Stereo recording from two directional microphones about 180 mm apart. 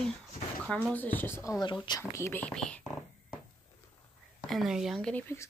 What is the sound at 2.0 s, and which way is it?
Speech, 15° left (ahead or behind).